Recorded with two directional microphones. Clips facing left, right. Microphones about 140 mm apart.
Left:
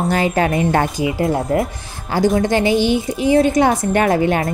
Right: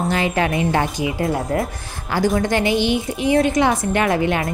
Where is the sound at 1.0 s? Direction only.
25° left (ahead or behind).